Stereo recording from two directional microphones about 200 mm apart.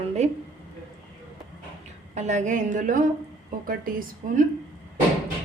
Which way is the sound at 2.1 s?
35° right (ahead or behind).